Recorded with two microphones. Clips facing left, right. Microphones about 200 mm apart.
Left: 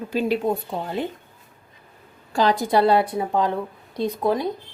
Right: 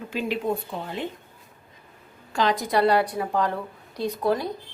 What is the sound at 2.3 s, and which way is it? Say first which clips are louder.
A woman's voice: left 3 dB; 30° left (ahead or behind).